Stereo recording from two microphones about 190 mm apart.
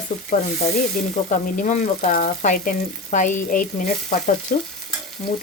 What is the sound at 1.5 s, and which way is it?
Frying, 40° left (ahead or behind).